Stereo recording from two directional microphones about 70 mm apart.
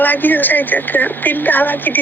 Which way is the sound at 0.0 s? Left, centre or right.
Left.